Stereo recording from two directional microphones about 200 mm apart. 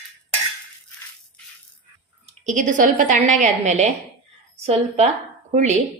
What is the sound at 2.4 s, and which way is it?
A woman's voice, 40° right (ahead or behind).